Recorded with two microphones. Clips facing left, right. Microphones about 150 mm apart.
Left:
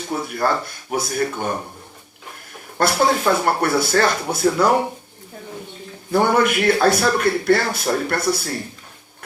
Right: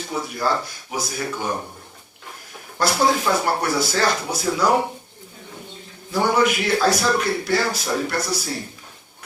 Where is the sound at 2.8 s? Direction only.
55° left (ahead or behind).